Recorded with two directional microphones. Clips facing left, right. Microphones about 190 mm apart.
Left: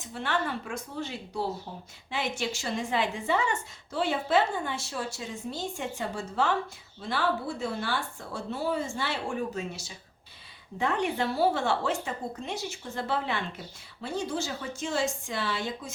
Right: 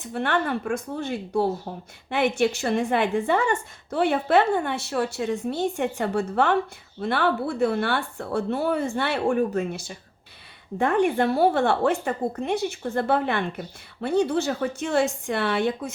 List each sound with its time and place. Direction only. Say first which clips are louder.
0.0 s a woman's voice: right 6 dB; 60° right (ahead or behind)